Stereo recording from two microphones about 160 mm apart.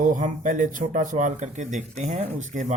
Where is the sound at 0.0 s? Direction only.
55° right (ahead or behind).